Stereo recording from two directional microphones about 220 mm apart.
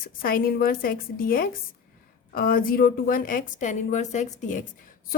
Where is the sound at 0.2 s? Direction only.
40° left (ahead or behind).